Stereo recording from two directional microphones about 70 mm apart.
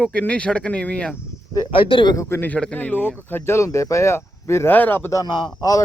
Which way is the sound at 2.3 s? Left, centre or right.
Left.